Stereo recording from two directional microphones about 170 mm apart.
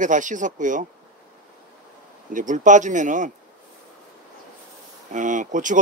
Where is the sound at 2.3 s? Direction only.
50° right (ahead or behind).